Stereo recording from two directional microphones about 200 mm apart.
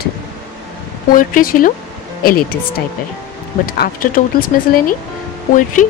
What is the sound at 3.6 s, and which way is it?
Speech, 50° left (ahead or behind).